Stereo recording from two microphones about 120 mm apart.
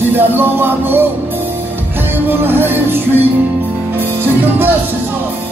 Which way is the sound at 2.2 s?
15° right (ahead or behind).